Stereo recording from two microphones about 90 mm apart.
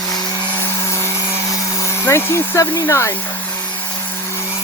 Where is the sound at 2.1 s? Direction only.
35° left (ahead or behind).